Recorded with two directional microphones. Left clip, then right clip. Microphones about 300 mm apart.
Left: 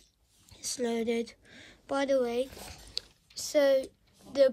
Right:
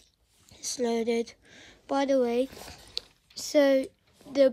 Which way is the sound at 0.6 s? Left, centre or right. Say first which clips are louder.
Right 3 dB; centre.